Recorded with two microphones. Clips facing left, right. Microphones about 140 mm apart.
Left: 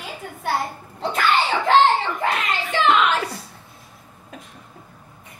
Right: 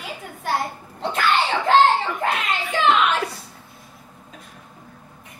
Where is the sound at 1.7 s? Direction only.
Centre (ahead or behind).